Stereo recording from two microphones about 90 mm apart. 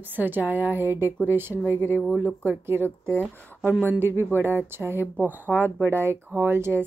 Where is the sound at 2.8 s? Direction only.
30° left (ahead or behind).